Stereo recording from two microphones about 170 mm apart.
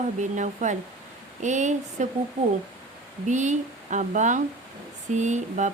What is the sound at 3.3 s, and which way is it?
Speech, 45° right (ahead or behind).